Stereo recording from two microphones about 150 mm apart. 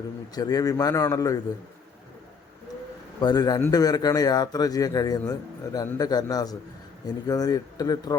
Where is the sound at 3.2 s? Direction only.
25° left (ahead or behind).